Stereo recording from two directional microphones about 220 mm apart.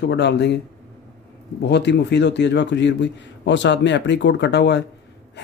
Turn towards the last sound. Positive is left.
turn(degrees=50)  # may be behind; listen again after turning